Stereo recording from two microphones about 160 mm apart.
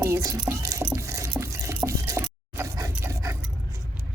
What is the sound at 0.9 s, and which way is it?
Liquid, 15° right (ahead or behind).